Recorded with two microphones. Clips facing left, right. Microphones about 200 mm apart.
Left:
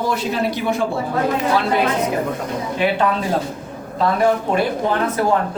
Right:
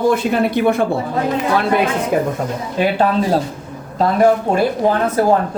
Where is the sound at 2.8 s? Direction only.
35° right (ahead or behind).